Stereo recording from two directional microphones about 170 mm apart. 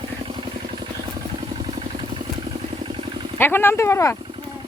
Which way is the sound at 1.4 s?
30° right (ahead or behind).